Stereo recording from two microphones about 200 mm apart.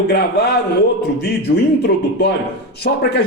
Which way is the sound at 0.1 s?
55° left (ahead or behind).